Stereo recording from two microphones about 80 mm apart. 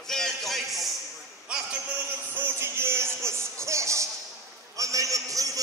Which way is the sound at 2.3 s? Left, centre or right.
Right.